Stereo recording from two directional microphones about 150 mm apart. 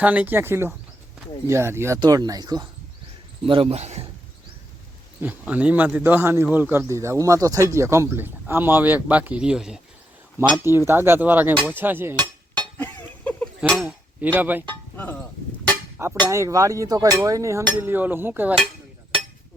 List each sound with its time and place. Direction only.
0.0 s speech: 10° right (ahead or behind)
2.0 s chink: 25° right (ahead or behind)
3.4 s speech: 35° right (ahead or behind)
5.2 s speech: 10° right (ahead or behind)
10.6 s speech: 15° right (ahead or behind)
12.5 s a sound: 10° left (ahead or behind)
13.7 s speech: centre (ahead or behind)
14.3 s speech: 10° right (ahead or behind)
14.7 s speech: 10° left (ahead or behind)
16.0 s chink: 20° right (ahead or behind)
17.7 s speech: 15° right (ahead or behind)